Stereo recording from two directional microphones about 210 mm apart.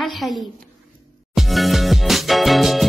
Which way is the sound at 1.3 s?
Centre (ahead or behind).